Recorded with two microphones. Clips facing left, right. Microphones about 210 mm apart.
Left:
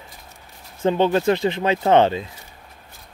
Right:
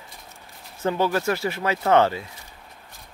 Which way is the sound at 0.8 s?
25° left (ahead or behind).